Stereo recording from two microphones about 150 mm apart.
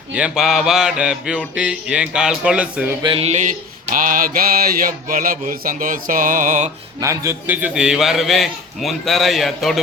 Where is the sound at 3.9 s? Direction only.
65° right (ahead or behind).